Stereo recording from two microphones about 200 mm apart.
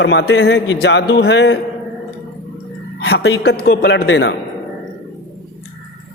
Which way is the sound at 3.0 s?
60° left (ahead or behind).